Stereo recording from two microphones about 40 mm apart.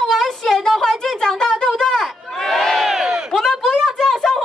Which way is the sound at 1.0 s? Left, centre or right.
Centre.